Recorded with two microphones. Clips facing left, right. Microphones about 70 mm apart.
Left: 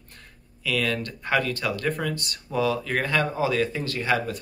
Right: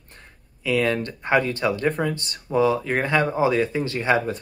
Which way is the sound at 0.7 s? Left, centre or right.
Right.